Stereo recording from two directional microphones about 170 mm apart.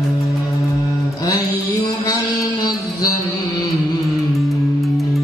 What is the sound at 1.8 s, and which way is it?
Music, 25° left (ahead or behind).